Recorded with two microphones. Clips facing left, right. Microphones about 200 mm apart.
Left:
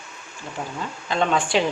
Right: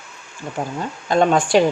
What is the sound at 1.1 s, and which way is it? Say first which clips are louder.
Speech: right 6 dB; 45° right (ahead or behind).